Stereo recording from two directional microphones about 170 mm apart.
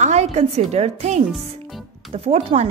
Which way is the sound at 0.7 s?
40° right (ahead or behind).